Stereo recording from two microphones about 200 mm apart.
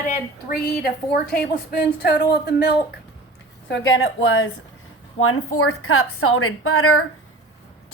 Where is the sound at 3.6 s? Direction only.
70° left (ahead or behind).